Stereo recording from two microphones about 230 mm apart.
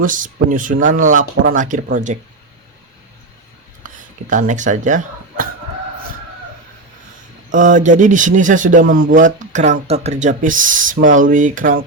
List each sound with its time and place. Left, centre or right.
0.0 s speech: right
3.8 s speech: right
7.5 s speech: right